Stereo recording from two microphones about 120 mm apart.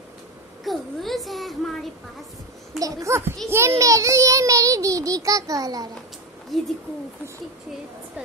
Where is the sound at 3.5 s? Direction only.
25° right (ahead or behind).